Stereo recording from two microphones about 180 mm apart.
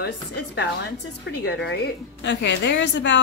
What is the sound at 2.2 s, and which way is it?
Speech, 80° left.